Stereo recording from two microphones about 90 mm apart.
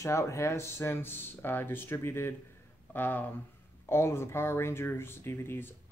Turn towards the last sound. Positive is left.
turn(degrees=25)  # may be behind; listen again after turning